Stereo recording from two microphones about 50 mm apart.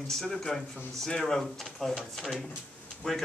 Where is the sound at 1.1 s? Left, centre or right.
Centre.